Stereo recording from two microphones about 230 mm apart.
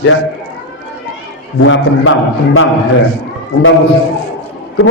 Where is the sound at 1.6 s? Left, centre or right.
Left.